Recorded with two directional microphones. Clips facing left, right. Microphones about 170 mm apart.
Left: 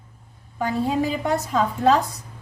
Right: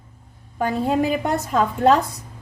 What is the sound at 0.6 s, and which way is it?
Speech, 55° right (ahead or behind).